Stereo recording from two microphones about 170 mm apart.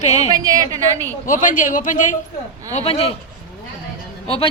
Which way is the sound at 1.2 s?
50° left (ahead or behind).